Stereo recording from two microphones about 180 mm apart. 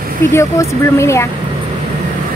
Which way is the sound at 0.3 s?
15° left (ahead or behind).